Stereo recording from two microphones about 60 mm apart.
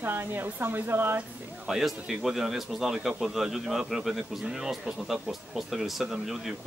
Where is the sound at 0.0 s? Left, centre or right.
Right.